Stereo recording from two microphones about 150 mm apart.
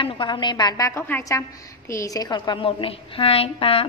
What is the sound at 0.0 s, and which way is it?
A woman's voice, 30° left (ahead or behind).